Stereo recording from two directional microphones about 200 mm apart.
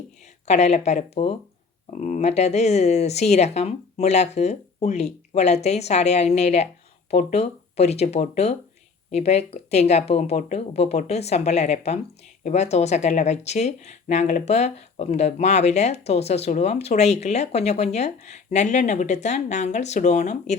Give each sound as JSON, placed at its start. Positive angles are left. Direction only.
{"t": 0.4, "sound": "speech", "side_deg": 35}